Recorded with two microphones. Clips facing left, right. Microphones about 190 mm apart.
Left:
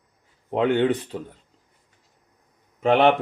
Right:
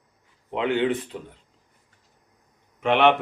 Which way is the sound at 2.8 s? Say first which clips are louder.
Left 2 dB; 35° left (ahead or behind).